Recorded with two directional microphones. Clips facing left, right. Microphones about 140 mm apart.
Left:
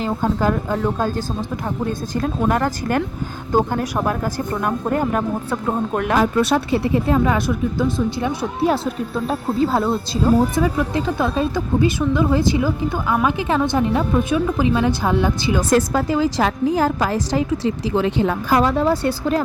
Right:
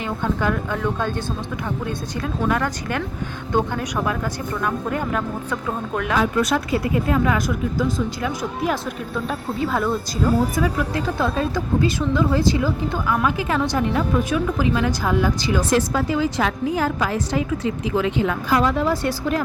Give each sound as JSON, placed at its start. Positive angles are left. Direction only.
{"t": 0.0, "sound": "a woman's voice", "side_deg": 35}
{"t": 6.4, "sound": "speech", "side_deg": 30}
{"t": 15.7, "sound": "a woman's voice", "side_deg": 45}